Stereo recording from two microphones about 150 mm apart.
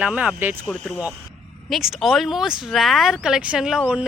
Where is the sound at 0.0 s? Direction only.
5° right (ahead or behind).